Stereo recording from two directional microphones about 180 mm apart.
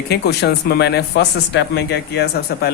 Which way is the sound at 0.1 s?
65° left (ahead or behind).